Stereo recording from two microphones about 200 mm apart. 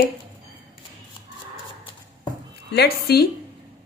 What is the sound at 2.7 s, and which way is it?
Speech, 50° left (ahead or behind).